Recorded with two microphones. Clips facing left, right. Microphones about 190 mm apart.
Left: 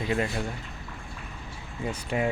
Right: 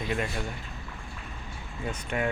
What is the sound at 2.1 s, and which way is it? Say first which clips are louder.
Speech: left 2 dB; 20° left (ahead or behind).